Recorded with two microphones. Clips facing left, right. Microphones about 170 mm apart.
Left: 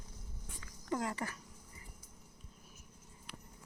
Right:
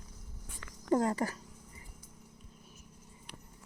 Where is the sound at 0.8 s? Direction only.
40° right (ahead or behind).